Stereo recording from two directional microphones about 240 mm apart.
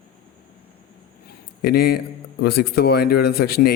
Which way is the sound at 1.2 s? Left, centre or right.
Left.